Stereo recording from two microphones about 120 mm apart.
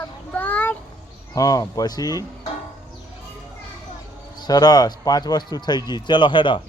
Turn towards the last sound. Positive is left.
turn(degrees=45)  # may be behind; listen again after turning